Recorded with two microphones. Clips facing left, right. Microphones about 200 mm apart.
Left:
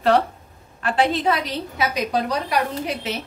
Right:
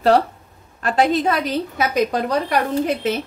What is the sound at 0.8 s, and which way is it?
A woman's voice, 40° right (ahead or behind).